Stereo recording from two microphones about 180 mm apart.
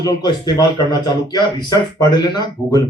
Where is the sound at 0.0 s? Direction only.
20° left (ahead or behind).